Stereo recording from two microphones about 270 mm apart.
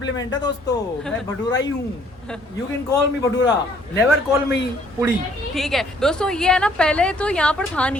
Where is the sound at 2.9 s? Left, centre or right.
Centre.